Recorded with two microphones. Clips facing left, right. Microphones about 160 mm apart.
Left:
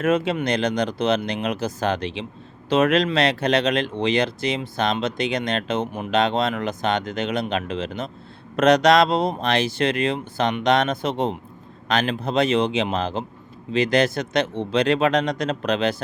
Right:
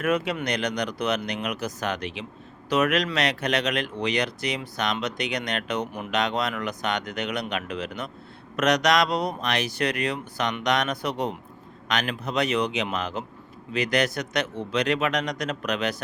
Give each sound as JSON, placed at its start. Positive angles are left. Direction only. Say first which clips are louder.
{"t": 0.0, "sound": "speech", "louder": "left 4 dB", "side_deg": 25}